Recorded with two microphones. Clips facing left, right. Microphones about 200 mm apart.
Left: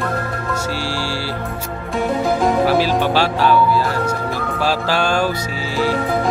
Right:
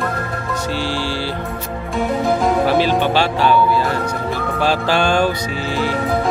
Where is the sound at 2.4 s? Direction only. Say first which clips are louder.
Left 1 dB; 5° left (ahead or behind).